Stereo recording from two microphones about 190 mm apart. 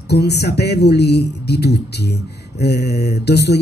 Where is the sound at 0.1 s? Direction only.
60° left (ahead or behind).